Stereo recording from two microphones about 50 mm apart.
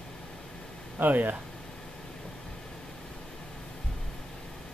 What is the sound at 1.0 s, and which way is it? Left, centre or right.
Speech, right.